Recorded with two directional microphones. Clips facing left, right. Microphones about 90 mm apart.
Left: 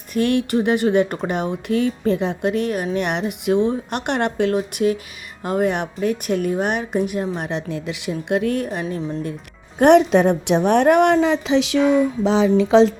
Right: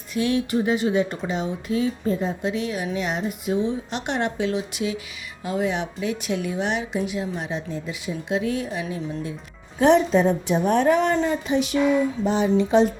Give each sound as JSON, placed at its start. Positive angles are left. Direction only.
{"t": 0.1, "sound": "speech", "side_deg": 55}
{"t": 9.7, "sound": "a woman's voice", "side_deg": 65}